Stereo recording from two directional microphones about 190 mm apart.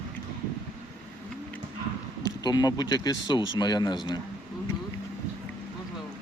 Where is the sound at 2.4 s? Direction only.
20° left (ahead or behind).